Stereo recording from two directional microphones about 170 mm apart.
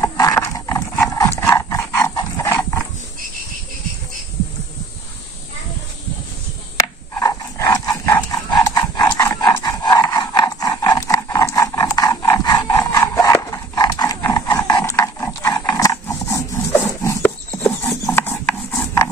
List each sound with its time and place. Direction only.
0.0 s horse: 15° left (ahead or behind)
1.4 s dog: 15° left (ahead or behind)
7.2 s dog: 20° left (ahead or behind)
17.5 s mechanisms: 10° left (ahead or behind)